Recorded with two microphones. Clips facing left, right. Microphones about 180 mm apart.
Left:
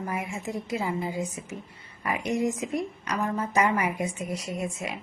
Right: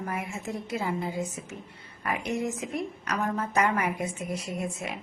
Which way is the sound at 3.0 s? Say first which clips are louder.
Left 1 dB; 10° left (ahead or behind).